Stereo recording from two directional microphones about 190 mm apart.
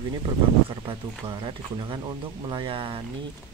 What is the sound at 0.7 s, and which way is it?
Speech, 25° right (ahead or behind).